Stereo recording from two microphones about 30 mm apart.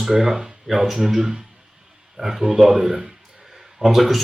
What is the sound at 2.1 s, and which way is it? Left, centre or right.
Speech, centre.